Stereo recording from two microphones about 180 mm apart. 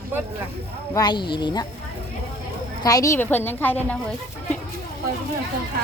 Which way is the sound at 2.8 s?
20° left (ahead or behind).